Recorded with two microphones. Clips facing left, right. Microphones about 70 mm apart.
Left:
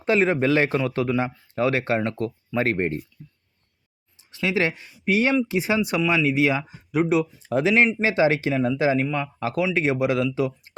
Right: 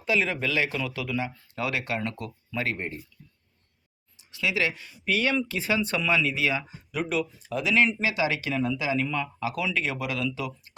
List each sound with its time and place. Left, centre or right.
0.0 s speech: left
2.6 s speech: left
4.2 s speech: left
5.0 s speech: left
9.0 s speech: centre